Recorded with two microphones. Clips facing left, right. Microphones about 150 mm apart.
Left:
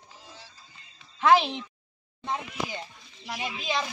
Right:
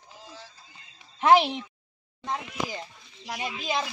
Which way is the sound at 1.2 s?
15° right (ahead or behind).